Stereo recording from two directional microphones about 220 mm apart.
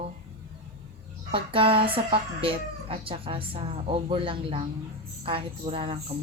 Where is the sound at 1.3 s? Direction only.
25° right (ahead or behind).